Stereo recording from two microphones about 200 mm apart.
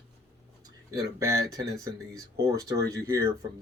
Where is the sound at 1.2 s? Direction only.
15° right (ahead or behind).